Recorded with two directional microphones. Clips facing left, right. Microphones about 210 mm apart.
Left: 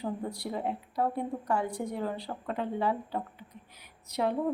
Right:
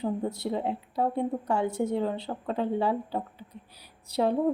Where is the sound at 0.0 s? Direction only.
25° right (ahead or behind).